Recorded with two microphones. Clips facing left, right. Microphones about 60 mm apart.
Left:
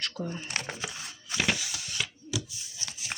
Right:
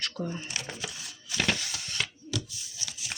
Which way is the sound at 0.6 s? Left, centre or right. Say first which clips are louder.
Left 2 dB; left.